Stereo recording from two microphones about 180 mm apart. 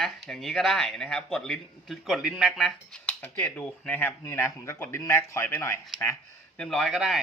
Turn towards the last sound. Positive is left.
turn(degrees=0)  # may be behind; listen again after turning